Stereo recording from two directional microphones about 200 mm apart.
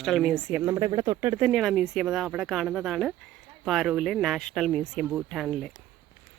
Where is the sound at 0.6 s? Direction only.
20° right (ahead or behind).